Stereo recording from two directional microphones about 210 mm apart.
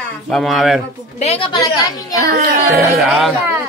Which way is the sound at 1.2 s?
25° left (ahead or behind).